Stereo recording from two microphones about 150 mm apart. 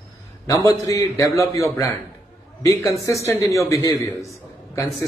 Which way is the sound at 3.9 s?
20° left (ahead or behind).